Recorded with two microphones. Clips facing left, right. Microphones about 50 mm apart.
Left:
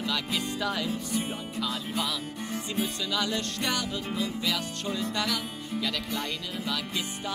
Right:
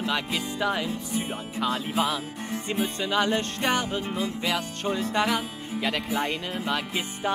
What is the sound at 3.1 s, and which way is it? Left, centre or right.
Music, right.